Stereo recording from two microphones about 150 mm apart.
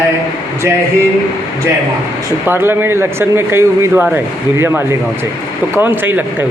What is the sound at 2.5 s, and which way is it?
Speech, 15° right (ahead or behind).